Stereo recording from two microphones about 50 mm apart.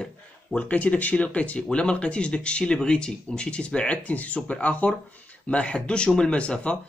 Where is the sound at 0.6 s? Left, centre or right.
Left.